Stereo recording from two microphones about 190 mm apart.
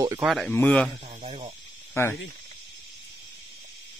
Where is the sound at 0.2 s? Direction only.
Centre (ahead or behind).